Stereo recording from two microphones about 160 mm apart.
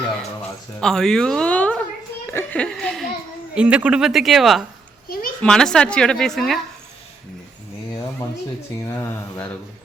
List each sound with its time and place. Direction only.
0.8 s a woman's voice: 5° left (ahead or behind)
5.0 s a sound: 65° left (ahead or behind)
5.4 s a woman's voice: 5° left (ahead or behind)
8.8 s speech: 15° left (ahead or behind)